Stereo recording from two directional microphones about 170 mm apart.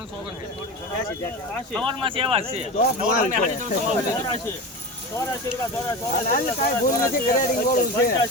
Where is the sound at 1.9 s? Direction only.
30° right (ahead or behind).